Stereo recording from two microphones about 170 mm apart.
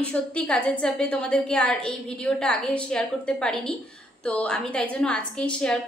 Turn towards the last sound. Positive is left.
turn(degrees=5)  # may be behind; listen again after turning